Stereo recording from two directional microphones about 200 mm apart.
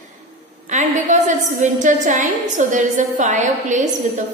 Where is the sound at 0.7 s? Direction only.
35° right (ahead or behind).